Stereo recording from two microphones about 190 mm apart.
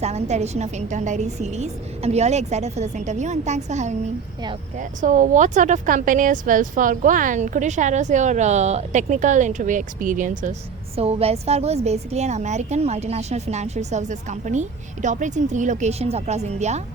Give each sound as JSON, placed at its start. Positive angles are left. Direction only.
{"t": 0.0, "sound": "a woman's voice", "side_deg": -35}
{"t": 10.9, "sound": "a woman's voice", "side_deg": -30}